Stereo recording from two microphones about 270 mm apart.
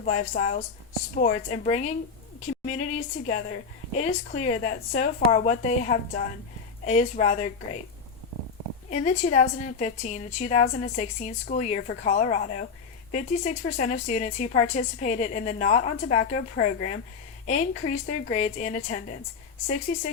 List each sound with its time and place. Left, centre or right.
0.0 s speech: left
8.9 s speech: left